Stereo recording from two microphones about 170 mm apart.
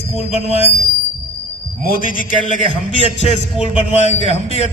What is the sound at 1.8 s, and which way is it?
Speech, 55° left (ahead or behind).